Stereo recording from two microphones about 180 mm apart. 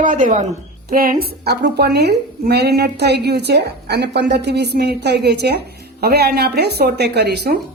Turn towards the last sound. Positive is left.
turn(degrees=-65)  # may be behind; listen again after turning